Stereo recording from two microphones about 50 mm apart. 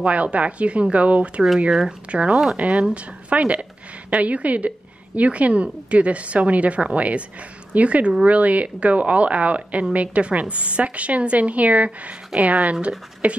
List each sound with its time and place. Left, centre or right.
0.0 s a woman's voice: right